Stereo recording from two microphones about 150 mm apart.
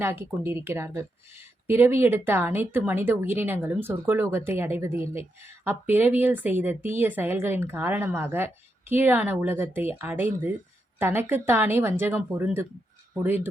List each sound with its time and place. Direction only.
0.0 s a woman's voice: 15° right (ahead or behind)